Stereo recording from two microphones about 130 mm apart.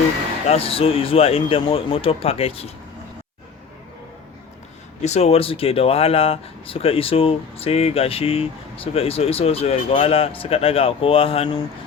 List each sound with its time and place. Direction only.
0.4 s speech: 50° left (ahead or behind)
5.0 s speech: 55° left (ahead or behind)